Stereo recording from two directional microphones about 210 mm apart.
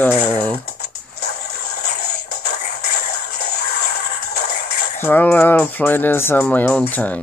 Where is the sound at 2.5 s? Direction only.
50° left (ahead or behind).